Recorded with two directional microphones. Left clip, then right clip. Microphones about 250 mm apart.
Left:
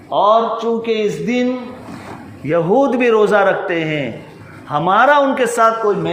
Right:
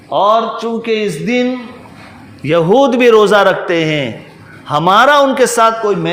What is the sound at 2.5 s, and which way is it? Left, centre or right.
A man's voice, right.